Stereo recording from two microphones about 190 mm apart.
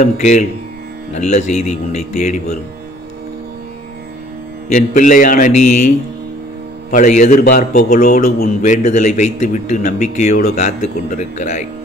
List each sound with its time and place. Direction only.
0.0 s a man's voice: 40° left (ahead or behind)
4.6 s a man's voice: 40° left (ahead or behind)
6.9 s a man's voice: 40° left (ahead or behind)